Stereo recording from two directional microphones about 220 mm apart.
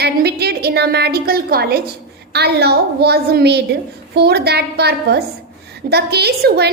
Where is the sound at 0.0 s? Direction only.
45° right (ahead or behind).